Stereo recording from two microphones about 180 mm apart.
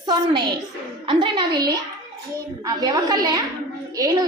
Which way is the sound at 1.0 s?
25° right (ahead or behind).